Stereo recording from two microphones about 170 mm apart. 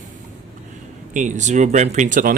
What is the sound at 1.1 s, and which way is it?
Speech, 45° right (ahead or behind).